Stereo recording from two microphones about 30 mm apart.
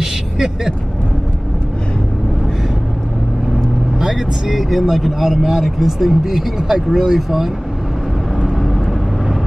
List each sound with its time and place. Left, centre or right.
0.0 s vehicle: centre
4.0 s vehicle: centre
5.6 s speech: centre
6.7 s speech: centre
8.5 s vehicle: centre